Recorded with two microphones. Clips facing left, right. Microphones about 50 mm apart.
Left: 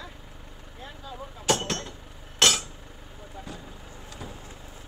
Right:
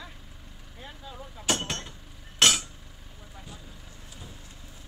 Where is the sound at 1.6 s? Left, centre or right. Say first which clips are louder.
Left 3 dB; centre.